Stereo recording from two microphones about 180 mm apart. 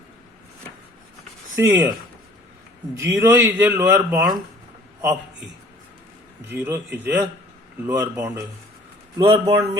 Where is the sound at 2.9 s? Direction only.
15° right (ahead or behind).